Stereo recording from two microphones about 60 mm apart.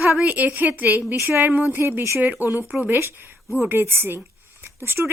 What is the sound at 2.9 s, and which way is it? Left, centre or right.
Speech, right.